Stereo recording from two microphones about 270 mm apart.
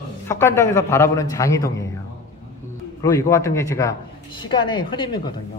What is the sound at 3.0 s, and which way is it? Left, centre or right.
Speech, centre.